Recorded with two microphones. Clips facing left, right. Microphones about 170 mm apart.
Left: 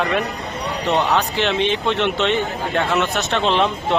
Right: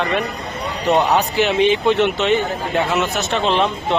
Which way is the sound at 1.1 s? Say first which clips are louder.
Right 3 dB; 10° right (ahead or behind).